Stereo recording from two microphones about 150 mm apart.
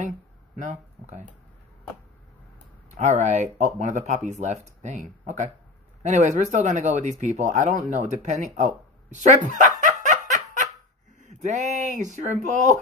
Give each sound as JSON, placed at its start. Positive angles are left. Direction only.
{"t": 2.9, "sound": "speech", "side_deg": -50}
{"t": 9.8, "sound": "a sound", "side_deg": -55}
{"t": 11.2, "sound": "speech", "side_deg": -55}